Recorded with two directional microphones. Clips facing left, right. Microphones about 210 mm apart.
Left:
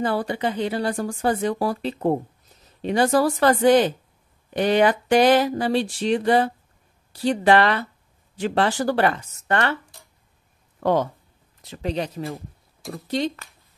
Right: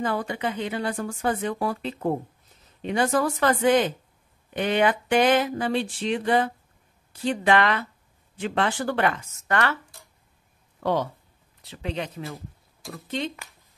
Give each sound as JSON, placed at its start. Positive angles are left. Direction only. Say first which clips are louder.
{"t": 0.0, "sound": "speech", "louder": "left 3 dB", "side_deg": 35}
{"t": 10.8, "sound": "speech", "louder": "left 4 dB", "side_deg": 50}
{"t": 11.7, "sound": "speech", "louder": "left 5 dB", "side_deg": 40}